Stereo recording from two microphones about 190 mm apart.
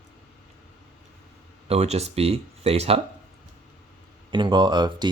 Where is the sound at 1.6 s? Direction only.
35° right (ahead or behind).